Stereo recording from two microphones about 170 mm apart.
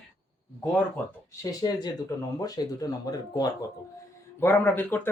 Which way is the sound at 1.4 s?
20° left (ahead or behind).